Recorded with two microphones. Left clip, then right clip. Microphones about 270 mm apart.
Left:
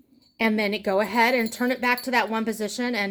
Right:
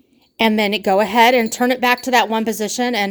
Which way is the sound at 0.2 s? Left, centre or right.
Right.